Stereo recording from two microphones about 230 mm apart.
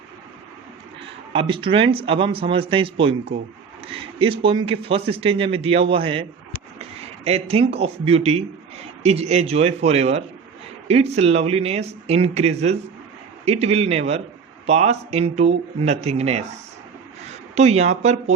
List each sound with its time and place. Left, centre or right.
1.3 s speech: right
7.3 s speech: right